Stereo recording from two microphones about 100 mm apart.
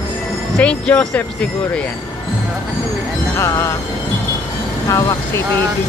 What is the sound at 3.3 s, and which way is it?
Speech, 30° left (ahead or behind).